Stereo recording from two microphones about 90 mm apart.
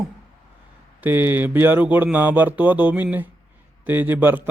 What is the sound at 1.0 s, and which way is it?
Speech, 25° right (ahead or behind).